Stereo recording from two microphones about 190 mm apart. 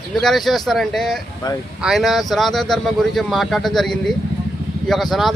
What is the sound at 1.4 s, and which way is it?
Speech, 20° left (ahead or behind).